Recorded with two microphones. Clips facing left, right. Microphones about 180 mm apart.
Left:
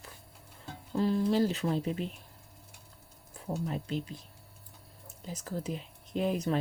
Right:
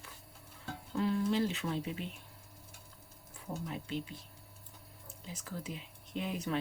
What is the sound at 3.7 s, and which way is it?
Speech, 40° left (ahead or behind).